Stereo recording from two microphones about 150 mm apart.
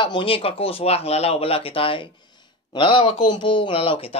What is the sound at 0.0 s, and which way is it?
Speech, 35° left (ahead or behind).